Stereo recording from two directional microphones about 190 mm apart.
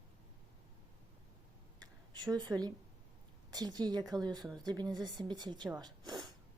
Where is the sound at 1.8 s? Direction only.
20° right (ahead or behind).